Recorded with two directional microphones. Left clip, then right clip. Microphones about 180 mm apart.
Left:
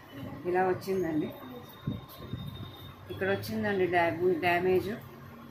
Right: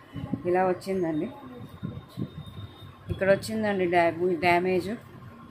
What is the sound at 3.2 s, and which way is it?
Speech, 80° right.